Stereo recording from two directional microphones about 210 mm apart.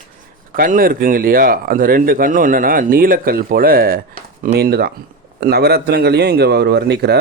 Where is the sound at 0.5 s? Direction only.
40° right (ahead or behind).